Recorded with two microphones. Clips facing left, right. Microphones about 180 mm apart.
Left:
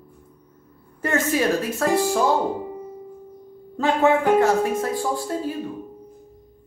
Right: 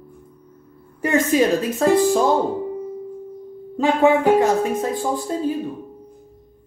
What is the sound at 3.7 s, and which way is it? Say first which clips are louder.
Speech: right 3 dB; 15° right (ahead or behind).